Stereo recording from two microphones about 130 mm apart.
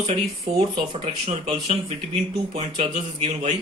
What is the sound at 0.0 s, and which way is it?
Speech, 45° right (ahead or behind).